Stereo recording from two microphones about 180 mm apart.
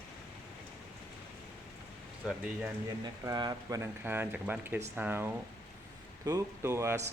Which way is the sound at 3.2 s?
20° right (ahead or behind).